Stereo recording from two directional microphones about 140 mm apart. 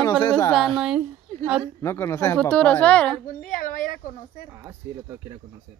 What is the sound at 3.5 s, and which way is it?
Speech, 75° left (ahead or behind).